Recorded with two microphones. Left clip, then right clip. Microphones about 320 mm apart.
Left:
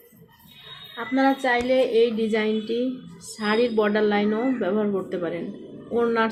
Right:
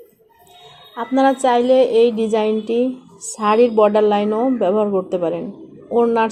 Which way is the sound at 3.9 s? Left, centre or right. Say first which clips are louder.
Right 7 dB; right.